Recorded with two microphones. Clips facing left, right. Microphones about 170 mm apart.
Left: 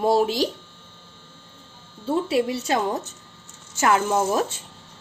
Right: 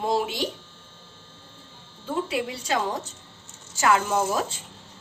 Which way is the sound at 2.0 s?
30° left (ahead or behind).